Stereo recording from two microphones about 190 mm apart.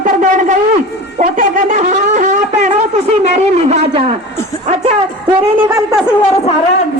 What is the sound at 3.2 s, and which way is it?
Speech, 35° right (ahead or behind).